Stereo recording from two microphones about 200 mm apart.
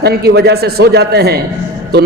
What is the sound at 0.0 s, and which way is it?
A man's voice, 55° right (ahead or behind).